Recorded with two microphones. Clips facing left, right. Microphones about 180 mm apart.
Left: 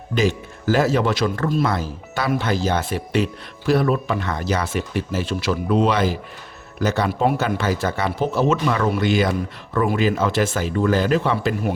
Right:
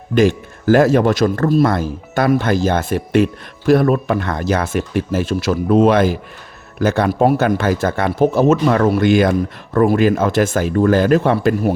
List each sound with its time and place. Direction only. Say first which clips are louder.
0.1 s speech: right 7 dB; 55° right (ahead or behind)